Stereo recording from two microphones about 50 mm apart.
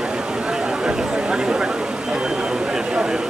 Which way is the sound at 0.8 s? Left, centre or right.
Centre.